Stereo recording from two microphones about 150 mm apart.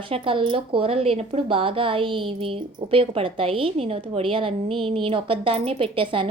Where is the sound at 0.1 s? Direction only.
35° right (ahead or behind).